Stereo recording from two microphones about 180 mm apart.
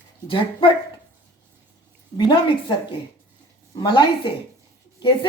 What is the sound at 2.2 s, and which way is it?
A woman's voice, 25° left (ahead or behind).